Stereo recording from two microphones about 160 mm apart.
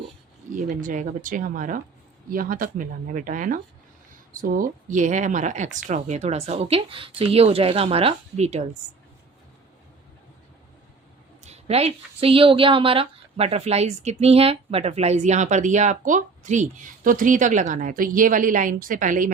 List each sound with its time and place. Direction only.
0.7 s a woman's voice: 55° right (ahead or behind)
11.4 s a woman's voice: 40° right (ahead or behind)